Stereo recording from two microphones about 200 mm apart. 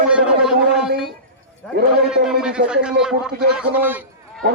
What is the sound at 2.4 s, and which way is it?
A man's voice, 5° right (ahead or behind).